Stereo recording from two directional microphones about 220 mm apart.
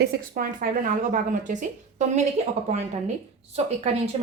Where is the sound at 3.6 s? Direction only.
30° right (ahead or behind).